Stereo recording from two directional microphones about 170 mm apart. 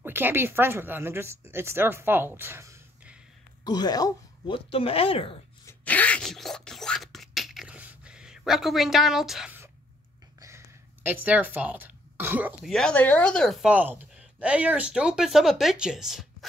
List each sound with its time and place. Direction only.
0.0 s speech: 10° right (ahead or behind)
3.6 s speech: 25° left (ahead or behind)
4.6 s speech: 35° left (ahead or behind)
5.7 s a sound: 10° left (ahead or behind)
10.4 s a sound: 15° right (ahead or behind)
12.7 s a woman's voice: 5° left (ahead or behind)